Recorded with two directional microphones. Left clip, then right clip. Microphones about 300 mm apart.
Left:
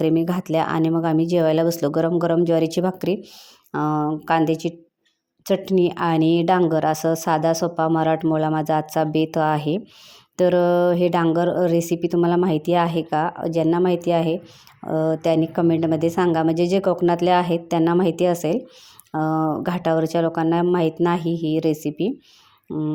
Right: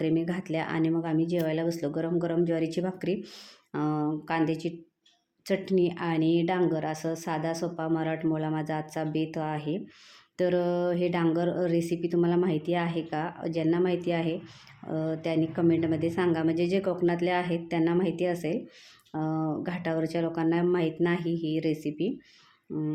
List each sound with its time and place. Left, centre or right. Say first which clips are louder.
0.0 s a woman's voice: left 8 dB; left